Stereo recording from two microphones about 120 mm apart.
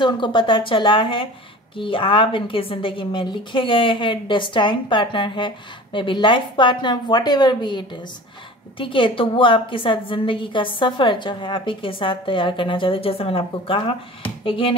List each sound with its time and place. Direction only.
0.0 s a woman's voice: 40° left (ahead or behind)